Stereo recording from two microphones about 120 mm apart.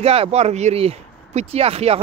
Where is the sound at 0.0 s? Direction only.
55° right (ahead or behind).